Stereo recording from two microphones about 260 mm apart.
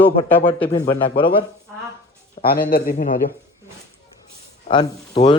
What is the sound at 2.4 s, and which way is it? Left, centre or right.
Speech, left.